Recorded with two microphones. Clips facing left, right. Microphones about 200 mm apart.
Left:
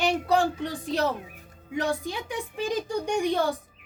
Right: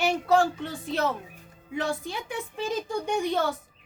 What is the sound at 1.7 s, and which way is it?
Speech, 15° left (ahead or behind).